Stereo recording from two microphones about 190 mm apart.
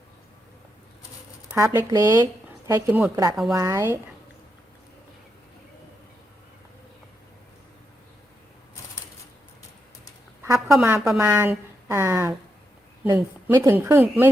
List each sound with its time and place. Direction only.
1.5 s a woman's voice: 10° right (ahead or behind)
10.7 s a woman's voice: 10° right (ahead or behind)
13.5 s a woman's voice: 15° right (ahead or behind)